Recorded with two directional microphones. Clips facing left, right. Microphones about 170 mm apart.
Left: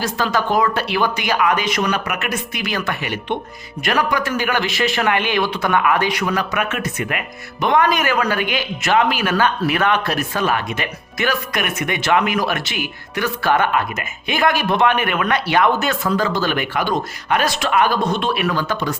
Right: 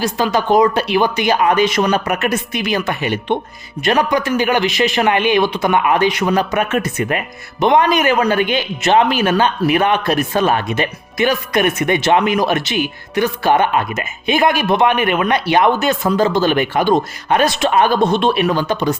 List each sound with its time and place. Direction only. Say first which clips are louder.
0.0 s speech: right 3 dB; 15° right (ahead or behind); by 7.2 s 30° right (ahead or behind)
7.6 s speech: right 4 dB; 20° right (ahead or behind)